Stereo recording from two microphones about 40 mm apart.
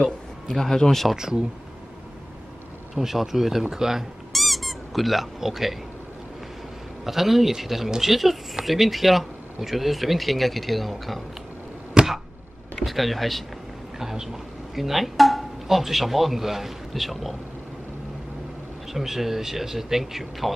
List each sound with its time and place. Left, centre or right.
0.5 s a man's voice: centre
1.1 s speech: centre
2.9 s speech: centre
4.3 s squeak: centre
7.1 s speech: centre
12.0 s chop: right
12.7 s speech: centre
13.9 s speech: centre
18.9 s speech: centre